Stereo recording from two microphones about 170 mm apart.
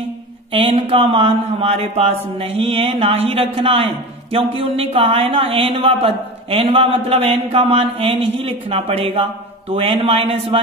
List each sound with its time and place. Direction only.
0.5 s speech: 30° right (ahead or behind)